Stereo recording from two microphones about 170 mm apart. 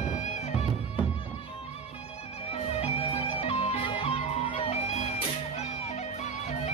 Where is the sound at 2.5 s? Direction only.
35° left (ahead or behind).